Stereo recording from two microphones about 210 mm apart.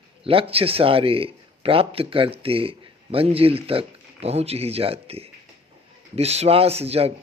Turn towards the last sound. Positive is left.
turn(degrees=-30)  # may be behind; listen again after turning